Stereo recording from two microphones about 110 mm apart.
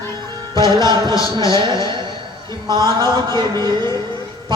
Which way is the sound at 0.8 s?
40° right (ahead or behind).